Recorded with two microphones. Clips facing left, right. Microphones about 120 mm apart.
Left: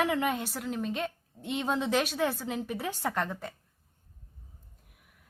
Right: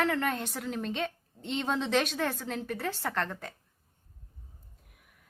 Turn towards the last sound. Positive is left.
turn(degrees=0)  # may be behind; listen again after turning